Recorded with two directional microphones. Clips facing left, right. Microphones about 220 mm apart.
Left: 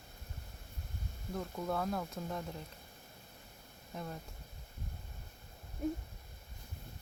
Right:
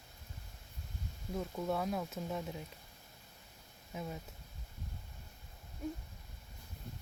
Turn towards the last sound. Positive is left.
turn(degrees=50)  # may be behind; listen again after turning